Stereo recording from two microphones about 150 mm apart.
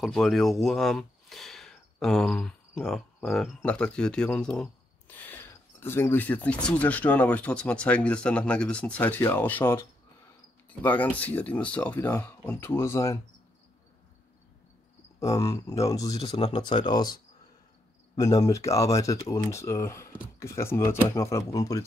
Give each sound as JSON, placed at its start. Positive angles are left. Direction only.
{"t": 0.0, "sound": "speech", "side_deg": 0}
{"t": 15.1, "sound": "speech", "side_deg": 20}
{"t": 16.3, "sound": "speech", "side_deg": 40}